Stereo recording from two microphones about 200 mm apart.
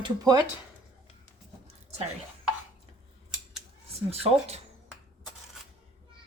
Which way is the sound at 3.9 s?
30° right (ahead or behind).